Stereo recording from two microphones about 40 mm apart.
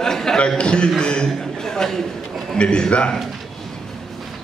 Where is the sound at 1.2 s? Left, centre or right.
Centre.